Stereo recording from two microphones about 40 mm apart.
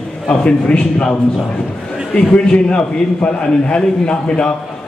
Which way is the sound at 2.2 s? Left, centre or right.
Left.